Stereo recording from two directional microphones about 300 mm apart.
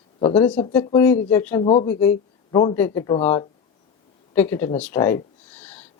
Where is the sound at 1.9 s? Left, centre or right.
Centre.